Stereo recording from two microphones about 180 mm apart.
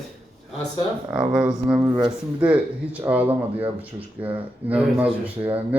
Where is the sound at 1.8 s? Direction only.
20° right (ahead or behind).